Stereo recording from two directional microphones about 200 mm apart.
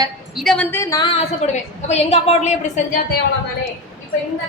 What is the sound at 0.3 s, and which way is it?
A woman's voice, 5° left (ahead or behind).